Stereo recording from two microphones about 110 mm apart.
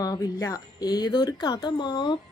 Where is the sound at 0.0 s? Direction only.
35° left (ahead or behind).